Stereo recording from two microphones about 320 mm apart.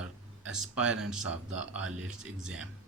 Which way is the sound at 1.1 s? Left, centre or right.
Right.